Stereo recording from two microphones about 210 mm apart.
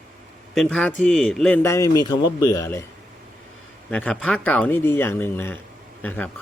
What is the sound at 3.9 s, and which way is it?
A man's voice, 5° left (ahead or behind).